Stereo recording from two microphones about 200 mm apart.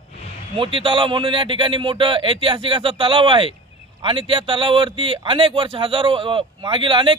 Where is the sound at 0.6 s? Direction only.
25° right (ahead or behind).